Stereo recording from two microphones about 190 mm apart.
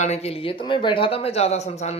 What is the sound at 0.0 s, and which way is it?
A man's voice, 35° left (ahead or behind).